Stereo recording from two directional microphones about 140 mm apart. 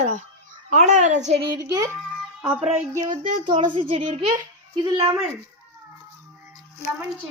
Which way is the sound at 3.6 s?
40° right (ahead or behind).